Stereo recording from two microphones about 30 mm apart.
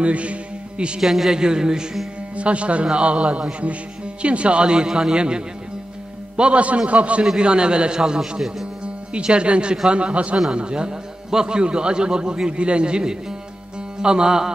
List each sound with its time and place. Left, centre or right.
0.0 s a man's voice: right
1.0 s a man's voice: centre
1.3 s a man's voice: right
2.3 s a man's voice: right
4.8 s a man's voice: centre
5.1 s a man's voice: right
6.9 s a man's voice: right
7.3 s a man's voice: right
8.2 s a man's voice: centre
8.8 s a man's voice: right
10.5 s a man's voice: right